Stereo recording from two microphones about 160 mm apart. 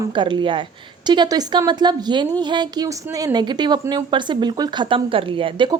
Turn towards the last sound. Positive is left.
turn(degrees=-30)  # may be behind; listen again after turning